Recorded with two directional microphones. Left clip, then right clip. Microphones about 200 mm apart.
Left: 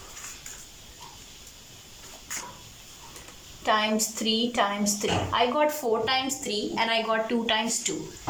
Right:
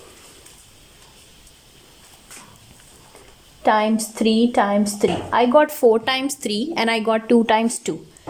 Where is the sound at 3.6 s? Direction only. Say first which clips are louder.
Right 7 dB; 50° right (ahead or behind); by 7.9 s 65° right (ahead or behind).